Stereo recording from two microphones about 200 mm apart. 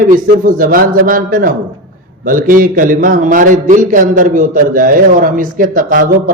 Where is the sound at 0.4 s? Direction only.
45° right (ahead or behind).